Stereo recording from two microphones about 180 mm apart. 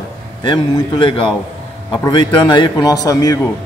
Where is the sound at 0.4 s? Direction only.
25° left (ahead or behind).